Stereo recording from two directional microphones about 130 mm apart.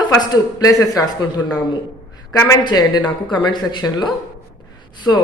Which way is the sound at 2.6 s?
35° left (ahead or behind).